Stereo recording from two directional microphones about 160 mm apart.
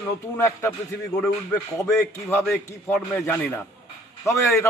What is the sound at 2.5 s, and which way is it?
Speech, centre (ahead or behind).